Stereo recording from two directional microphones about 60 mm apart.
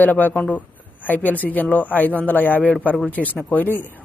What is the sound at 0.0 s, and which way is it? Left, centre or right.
Speech, left.